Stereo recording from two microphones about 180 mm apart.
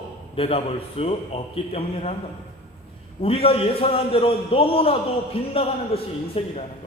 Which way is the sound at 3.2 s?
30° left (ahead or behind).